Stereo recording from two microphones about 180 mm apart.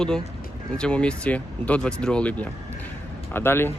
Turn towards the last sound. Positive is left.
turn(degrees=15)  # may be behind; listen again after turning